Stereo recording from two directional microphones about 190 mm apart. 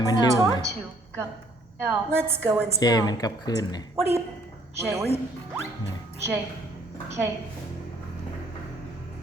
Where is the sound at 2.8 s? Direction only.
20° left (ahead or behind).